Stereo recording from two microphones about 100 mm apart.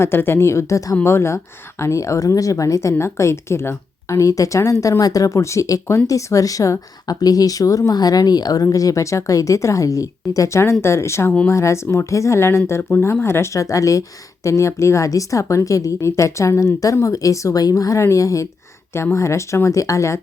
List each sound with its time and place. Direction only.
0.0 s a woman's voice: 25° left (ahead or behind)